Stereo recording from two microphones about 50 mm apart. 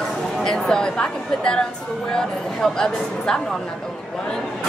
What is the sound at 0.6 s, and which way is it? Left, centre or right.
Speech, centre.